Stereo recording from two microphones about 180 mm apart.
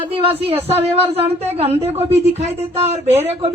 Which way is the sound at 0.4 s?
35° right (ahead or behind).